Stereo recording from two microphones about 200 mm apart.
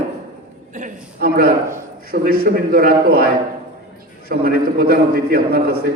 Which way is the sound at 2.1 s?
50° right (ahead or behind).